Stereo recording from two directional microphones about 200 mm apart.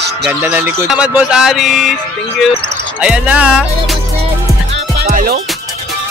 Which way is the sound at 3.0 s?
5° right (ahead or behind).